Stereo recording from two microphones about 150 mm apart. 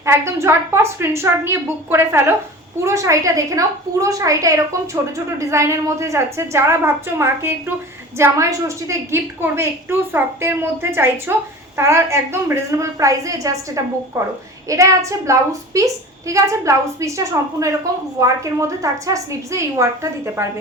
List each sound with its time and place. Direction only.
0.0 s a woman's voice: 15° right (ahead or behind)